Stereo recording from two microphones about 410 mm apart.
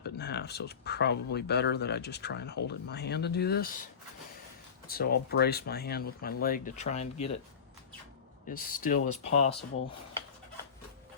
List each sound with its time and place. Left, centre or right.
0.0 s speech: left
4.9 s speech: left
8.4 s speech: centre